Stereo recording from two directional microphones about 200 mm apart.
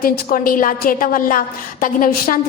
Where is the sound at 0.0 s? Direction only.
45° left (ahead or behind).